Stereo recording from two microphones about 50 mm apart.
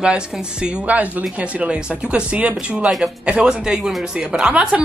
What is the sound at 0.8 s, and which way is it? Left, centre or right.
Speech, right.